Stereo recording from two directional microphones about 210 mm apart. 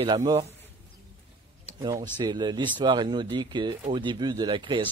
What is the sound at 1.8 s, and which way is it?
Speech, 20° right (ahead or behind).